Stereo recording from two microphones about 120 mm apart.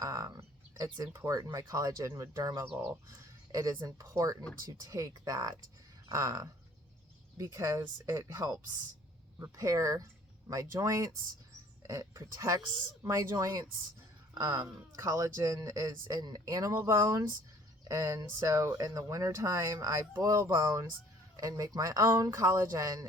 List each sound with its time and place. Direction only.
0.0 s a sound: 30° right (ahead or behind)
0.9 s speech: 30° right (ahead or behind)
2.6 s speech: 20° right (ahead or behind)